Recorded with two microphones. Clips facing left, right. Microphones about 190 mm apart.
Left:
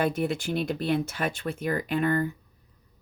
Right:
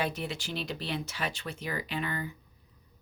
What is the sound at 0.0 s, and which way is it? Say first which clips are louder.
Speech: left 7 dB; 50° left (ahead or behind).